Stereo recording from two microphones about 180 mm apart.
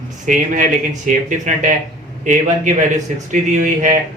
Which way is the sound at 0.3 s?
45° right (ahead or behind).